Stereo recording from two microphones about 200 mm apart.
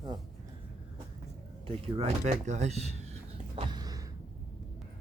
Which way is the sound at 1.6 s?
30° right (ahead or behind).